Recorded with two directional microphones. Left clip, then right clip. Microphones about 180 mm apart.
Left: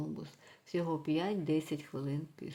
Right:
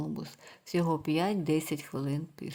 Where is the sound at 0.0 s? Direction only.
35° right (ahead or behind).